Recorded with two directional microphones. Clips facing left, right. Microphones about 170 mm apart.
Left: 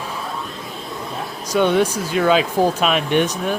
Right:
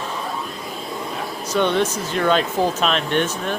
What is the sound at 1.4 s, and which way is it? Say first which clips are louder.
Speech: left 3 dB; 10° left (ahead or behind).